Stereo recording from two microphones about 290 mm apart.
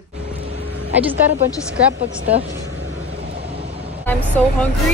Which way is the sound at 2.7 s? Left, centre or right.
Right.